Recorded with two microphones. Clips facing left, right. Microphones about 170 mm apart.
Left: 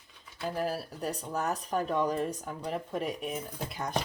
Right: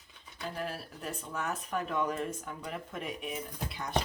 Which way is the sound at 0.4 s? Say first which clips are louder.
Left 6 dB; 40° left (ahead or behind).